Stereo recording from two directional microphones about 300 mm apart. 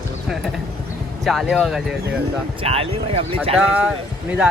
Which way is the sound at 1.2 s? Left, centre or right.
Centre.